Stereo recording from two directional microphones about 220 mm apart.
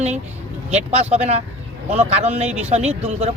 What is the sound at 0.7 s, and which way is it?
Speech, 30° right (ahead or behind).